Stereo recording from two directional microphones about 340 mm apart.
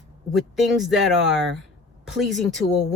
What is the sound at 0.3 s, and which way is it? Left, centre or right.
Speech, centre.